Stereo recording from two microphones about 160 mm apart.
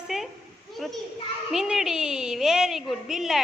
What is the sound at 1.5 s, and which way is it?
A woman's voice, 5° right (ahead or behind).